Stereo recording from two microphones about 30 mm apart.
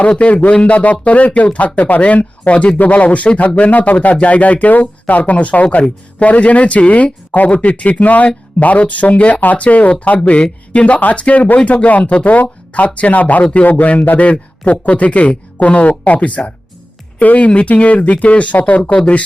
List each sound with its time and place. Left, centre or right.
0.4 s speech: left
2.7 s speech: left
4.0 s speech: left
4.7 s speech: left
10.7 s speech: left
13.7 s speech: left
14.3 s speech: left